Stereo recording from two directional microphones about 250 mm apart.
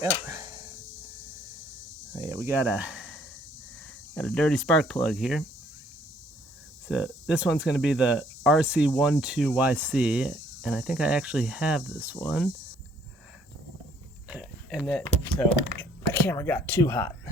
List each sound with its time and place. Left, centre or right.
0.0 s speech: centre
2.1 s speech: centre
6.8 s speech: centre
14.3 s a sound: centre
15.8 s speech: centre